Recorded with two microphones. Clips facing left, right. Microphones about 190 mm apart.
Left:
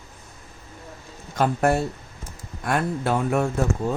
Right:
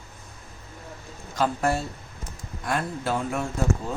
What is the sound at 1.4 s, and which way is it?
Speech, 55° left (ahead or behind).